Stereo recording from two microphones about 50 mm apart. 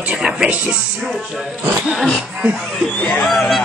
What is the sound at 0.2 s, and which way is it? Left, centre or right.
Speech, centre.